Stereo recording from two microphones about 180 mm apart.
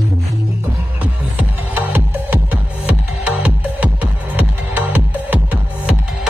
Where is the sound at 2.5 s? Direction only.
5° right (ahead or behind).